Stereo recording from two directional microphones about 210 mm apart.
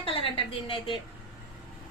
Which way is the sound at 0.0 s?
25° left (ahead or behind).